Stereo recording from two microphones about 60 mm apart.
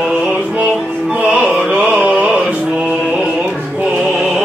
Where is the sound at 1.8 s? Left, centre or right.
Centre.